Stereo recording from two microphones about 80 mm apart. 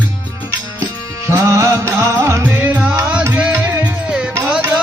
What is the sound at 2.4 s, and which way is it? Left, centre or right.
Music, right.